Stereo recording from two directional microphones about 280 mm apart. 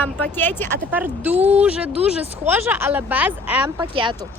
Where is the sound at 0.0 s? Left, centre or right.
Centre.